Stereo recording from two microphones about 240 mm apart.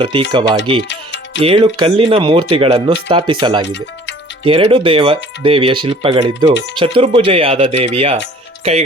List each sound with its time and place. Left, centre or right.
0.0 s speech: right
0.9 s music: left
1.4 s speech: right